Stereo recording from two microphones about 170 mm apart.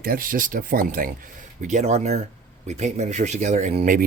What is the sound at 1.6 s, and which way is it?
Speech, 40° right (ahead or behind).